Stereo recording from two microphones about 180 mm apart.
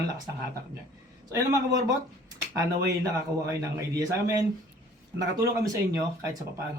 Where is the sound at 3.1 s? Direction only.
15° right (ahead or behind).